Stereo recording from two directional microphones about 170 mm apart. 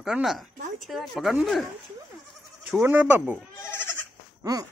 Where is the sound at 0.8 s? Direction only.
Centre (ahead or behind).